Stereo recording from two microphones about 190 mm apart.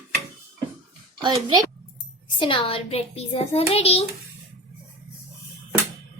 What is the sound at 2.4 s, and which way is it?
A child's voice, 25° left (ahead or behind).